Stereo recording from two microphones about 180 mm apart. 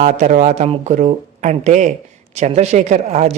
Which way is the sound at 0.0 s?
40° right (ahead or behind).